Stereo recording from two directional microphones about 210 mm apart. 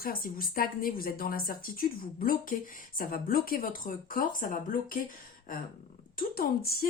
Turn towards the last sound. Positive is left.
turn(degrees=45)  # may be behind; listen again after turning